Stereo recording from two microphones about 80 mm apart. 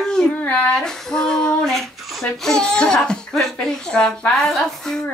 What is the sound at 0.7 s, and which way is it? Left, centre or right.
Speech, centre.